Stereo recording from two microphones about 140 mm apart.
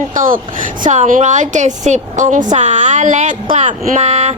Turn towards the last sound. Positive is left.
turn(degrees=-50)  # may be behind; listen again after turning